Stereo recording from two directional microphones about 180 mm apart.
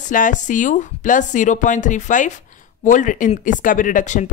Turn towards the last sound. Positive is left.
turn(degrees=45)  # may be behind; listen again after turning